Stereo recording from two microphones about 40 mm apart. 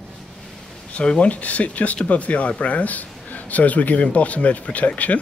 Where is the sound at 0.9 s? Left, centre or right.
Left.